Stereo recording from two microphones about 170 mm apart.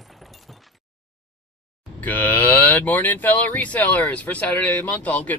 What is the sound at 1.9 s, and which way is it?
Speech, 10° left (ahead or behind).